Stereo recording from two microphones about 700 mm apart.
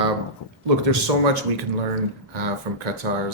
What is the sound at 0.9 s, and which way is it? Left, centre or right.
Speech, right.